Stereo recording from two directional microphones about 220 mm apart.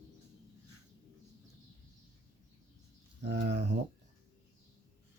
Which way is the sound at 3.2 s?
50° right (ahead or behind).